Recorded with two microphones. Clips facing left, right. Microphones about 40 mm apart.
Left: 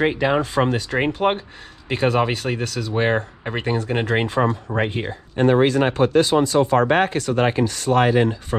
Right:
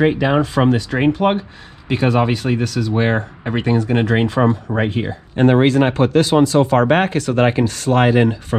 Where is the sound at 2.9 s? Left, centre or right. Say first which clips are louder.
Even; centre.